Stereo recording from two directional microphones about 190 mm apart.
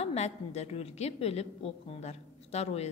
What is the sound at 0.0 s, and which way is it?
A woman's voice, 35° left (ahead or behind).